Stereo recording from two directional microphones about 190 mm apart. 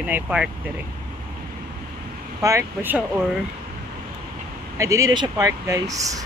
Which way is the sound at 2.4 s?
15° right (ahead or behind).